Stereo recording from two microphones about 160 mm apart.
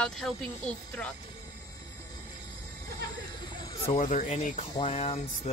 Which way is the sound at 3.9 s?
50° left (ahead or behind).